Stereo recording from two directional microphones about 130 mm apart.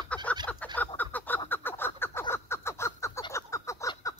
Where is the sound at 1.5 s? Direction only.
15° left (ahead or behind).